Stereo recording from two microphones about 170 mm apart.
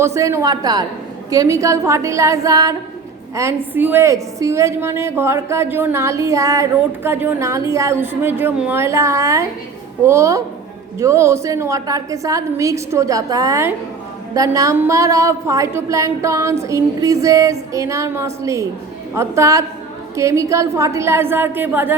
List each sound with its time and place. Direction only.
0.0 s a woman's voice: 15° right (ahead or behind)